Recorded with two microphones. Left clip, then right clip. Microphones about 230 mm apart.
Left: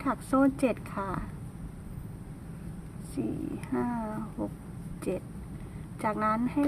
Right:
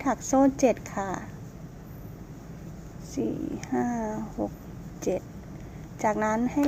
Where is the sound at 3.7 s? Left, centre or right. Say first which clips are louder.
Right 3 dB; left.